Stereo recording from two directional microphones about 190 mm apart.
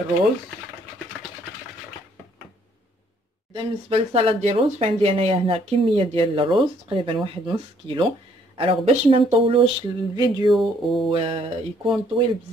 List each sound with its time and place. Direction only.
3.5 s speech: 30° right (ahead or behind)
10.5 s speech: centre (ahead or behind)
11.1 s speech: 30° right (ahead or behind)